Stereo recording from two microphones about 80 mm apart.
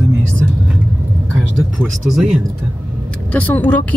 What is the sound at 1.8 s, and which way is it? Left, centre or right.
Speech, centre.